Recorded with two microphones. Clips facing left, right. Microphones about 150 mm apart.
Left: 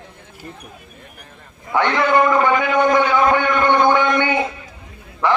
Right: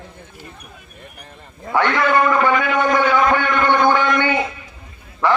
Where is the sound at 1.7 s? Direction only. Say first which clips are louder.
Even; 20° left (ahead or behind).